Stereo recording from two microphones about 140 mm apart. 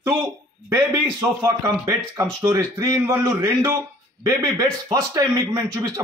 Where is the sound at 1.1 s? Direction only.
25° right (ahead or behind).